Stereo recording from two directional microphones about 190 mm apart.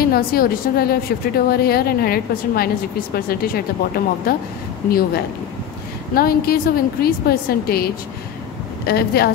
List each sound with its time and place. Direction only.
0.0 s a woman's voice: 50° left (ahead or behind)